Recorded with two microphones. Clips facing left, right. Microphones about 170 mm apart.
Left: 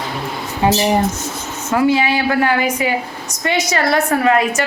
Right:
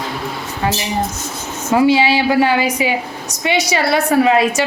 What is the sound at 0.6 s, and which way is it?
Speech, 20° left (ahead or behind).